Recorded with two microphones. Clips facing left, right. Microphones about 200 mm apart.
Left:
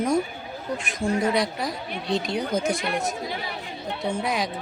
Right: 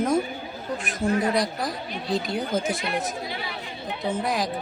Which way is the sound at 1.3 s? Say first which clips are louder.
Even; centre (ahead or behind).